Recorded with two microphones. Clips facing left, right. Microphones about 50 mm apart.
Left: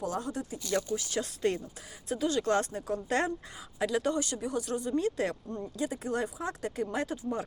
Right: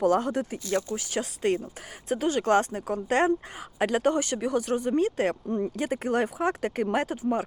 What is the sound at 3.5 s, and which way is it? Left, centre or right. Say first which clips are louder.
Speech: right 4 dB; right.